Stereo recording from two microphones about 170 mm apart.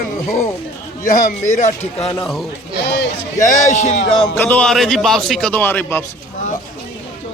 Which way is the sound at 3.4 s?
45° left (ahead or behind).